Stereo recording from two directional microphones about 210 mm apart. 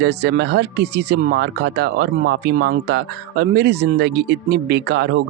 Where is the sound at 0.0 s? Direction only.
55° right (ahead or behind).